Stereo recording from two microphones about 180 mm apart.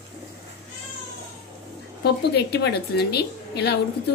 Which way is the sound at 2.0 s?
65° left (ahead or behind).